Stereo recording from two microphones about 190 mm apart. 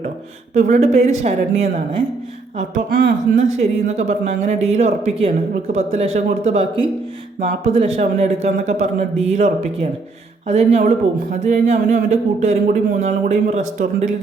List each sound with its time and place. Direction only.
0.5 s speech: 35° right (ahead or behind)
3.6 s speech: 35° right (ahead or behind)